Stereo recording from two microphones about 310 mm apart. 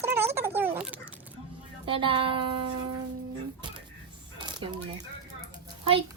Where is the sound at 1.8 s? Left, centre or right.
Centre.